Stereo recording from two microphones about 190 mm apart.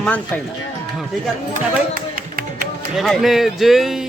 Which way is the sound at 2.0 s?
45° right (ahead or behind).